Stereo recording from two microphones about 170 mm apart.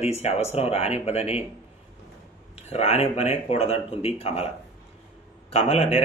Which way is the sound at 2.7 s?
40° left (ahead or behind).